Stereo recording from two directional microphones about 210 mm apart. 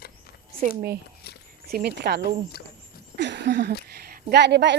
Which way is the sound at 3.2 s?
55° right (ahead or behind).